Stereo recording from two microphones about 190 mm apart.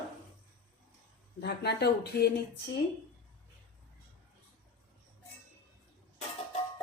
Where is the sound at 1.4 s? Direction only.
60° left (ahead or behind).